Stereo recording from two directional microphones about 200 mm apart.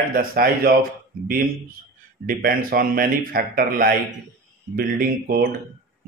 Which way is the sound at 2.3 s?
45° right (ahead or behind).